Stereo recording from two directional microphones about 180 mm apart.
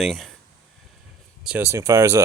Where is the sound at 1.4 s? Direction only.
10° right (ahead or behind).